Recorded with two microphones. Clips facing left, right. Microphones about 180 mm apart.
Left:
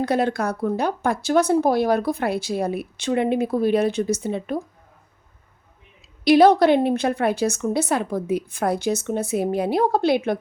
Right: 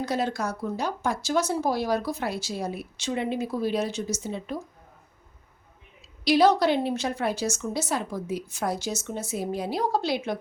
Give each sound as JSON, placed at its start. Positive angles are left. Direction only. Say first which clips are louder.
{"t": 0.0, "sound": "speech", "louder": "left 6 dB", "side_deg": 60}
{"t": 6.2, "sound": "speech", "louder": "left 6 dB", "side_deg": 55}